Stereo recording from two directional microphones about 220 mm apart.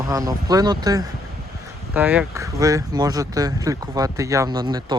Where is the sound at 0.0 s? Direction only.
15° right (ahead or behind).